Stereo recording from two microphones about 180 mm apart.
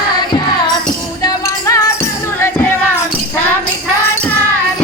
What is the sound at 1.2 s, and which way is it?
Music, 20° left (ahead or behind).